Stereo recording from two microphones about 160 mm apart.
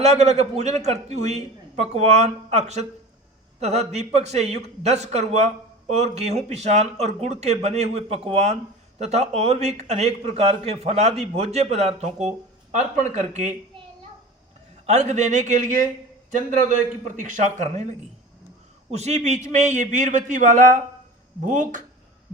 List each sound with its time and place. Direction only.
0.0 s a man's voice: 45° right (ahead or behind)
14.8 s speech: 45° right (ahead or behind)
17.2 s speech: 50° right (ahead or behind)
18.9 s speech: 45° right (ahead or behind)